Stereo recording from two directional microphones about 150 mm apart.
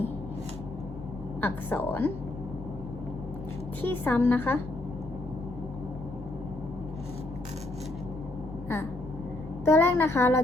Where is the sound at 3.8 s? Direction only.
15° left (ahead or behind).